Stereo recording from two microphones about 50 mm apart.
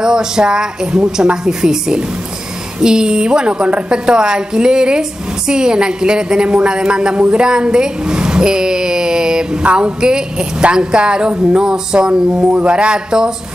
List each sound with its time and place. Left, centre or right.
0.0 s a woman's voice: centre